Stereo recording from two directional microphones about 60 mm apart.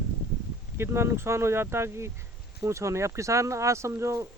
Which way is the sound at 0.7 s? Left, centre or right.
Right.